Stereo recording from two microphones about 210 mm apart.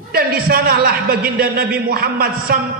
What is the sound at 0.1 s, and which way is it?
A man's voice, 45° right (ahead or behind).